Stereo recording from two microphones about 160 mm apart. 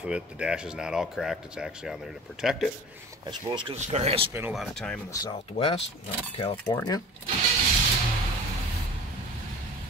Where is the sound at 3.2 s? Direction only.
25° right (ahead or behind).